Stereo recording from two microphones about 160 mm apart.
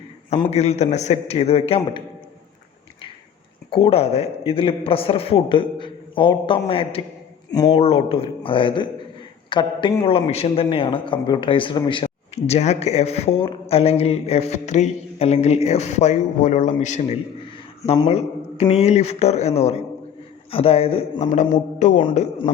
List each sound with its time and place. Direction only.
0.5 s speech: 45° left (ahead or behind)
3.7 s a man's voice: 35° left (ahead or behind)
7.5 s speech: 25° left (ahead or behind)
7.8 s a man's voice: 35° left (ahead or behind)